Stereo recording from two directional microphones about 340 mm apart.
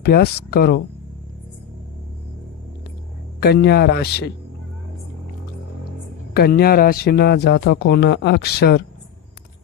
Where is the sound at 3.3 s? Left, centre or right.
Left.